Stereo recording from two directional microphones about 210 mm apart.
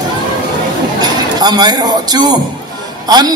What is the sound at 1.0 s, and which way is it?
A man's voice, 20° right (ahead or behind).